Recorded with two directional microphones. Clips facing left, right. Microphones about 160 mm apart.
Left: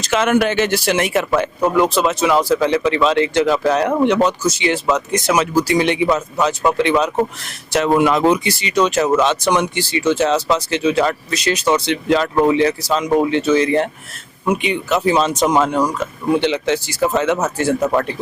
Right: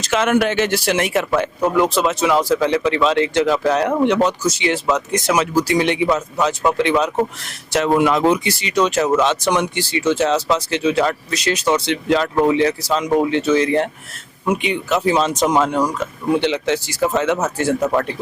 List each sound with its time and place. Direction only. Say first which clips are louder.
0.0 s speech: left 1 dB; 5° left (ahead or behind)
9.0 s speech: left 1 dB; 20° left (ahead or behind)
9.2 s speech: left 1 dB; 10° left (ahead or behind)
17.0 s speech: left 1 dB; 20° left (ahead or behind)